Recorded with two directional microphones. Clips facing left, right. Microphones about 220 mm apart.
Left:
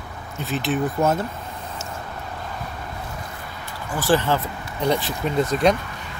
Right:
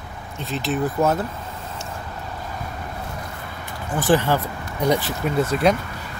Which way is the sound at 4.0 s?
15° right (ahead or behind).